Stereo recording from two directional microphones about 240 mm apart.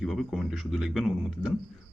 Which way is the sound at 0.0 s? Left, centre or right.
Centre.